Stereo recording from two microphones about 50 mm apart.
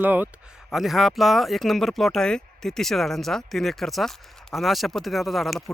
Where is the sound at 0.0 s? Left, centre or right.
Right.